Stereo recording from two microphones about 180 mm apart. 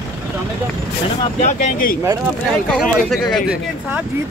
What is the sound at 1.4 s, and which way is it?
Speech, 45° left (ahead or behind).